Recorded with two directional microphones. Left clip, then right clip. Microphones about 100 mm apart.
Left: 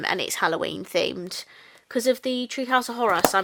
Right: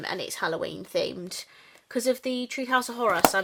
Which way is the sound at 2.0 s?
30° left (ahead or behind).